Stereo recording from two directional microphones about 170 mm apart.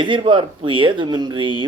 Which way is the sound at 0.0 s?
30° right (ahead or behind).